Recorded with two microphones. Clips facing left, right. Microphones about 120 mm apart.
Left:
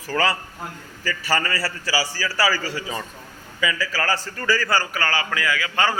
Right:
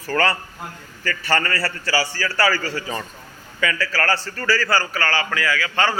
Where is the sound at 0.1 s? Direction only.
5° left (ahead or behind).